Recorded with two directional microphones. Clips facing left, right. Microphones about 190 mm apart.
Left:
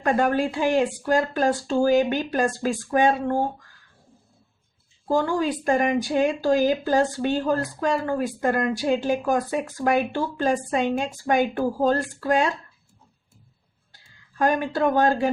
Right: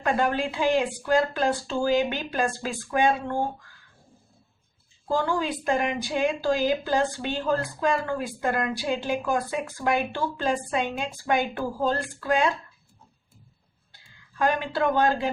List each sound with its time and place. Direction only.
0.0 s speech: 45° left (ahead or behind)
5.0 s speech: 45° left (ahead or behind)
13.9 s speech: 45° left (ahead or behind)